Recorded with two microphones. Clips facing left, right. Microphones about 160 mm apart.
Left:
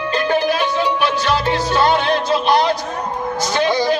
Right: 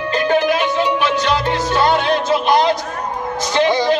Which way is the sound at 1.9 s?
15° right (ahead or behind).